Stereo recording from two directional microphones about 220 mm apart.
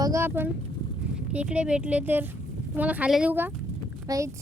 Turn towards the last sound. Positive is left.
turn(degrees=-15)  # may be behind; listen again after turning